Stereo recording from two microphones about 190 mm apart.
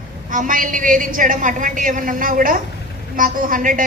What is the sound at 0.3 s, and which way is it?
A woman's voice, 45° right (ahead or behind).